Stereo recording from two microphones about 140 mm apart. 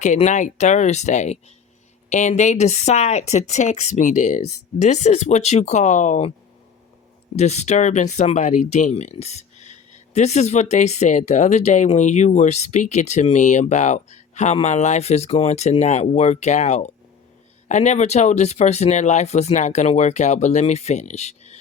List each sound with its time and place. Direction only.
0.0 s speech: 55° left (ahead or behind)
7.3 s speech: 55° left (ahead or behind)